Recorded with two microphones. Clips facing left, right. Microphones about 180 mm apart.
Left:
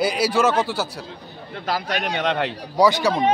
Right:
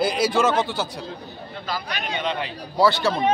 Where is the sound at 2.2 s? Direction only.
80° left.